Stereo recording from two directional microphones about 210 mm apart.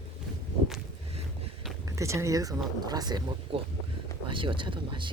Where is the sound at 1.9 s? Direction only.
15° right (ahead or behind).